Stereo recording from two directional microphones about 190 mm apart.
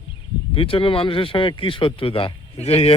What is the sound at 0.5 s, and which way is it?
Speech, 30° left (ahead or behind).